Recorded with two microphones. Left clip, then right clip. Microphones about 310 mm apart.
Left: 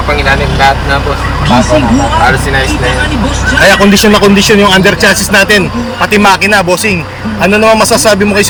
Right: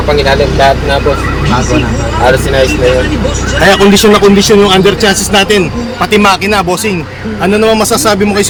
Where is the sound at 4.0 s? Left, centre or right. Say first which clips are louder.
Even; centre.